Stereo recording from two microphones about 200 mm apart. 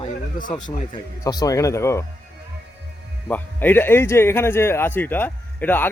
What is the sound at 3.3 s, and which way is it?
Speech, 10° left (ahead or behind).